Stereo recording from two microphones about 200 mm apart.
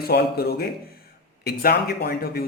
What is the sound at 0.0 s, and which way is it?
Speech, 50° left (ahead or behind).